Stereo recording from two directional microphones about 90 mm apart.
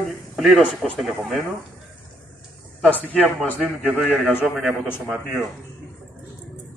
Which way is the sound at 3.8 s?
10° right (ahead or behind).